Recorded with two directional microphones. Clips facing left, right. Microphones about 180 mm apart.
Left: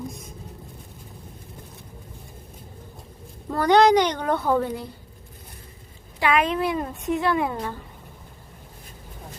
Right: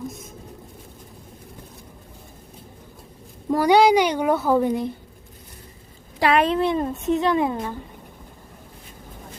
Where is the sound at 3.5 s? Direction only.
10° right (ahead or behind).